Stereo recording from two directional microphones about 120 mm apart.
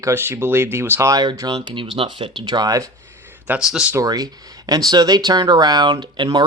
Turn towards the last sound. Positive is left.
turn(degrees=-40)  # may be behind; listen again after turning